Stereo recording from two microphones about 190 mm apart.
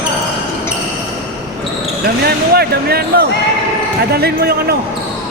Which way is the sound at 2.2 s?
55° right (ahead or behind).